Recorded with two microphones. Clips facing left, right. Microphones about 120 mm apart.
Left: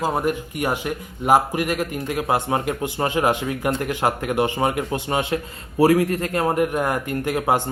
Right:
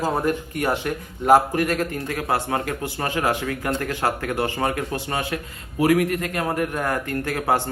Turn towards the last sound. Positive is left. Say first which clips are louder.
# left 2 dB
turn(degrees=15)  # may be behind; listen again after turning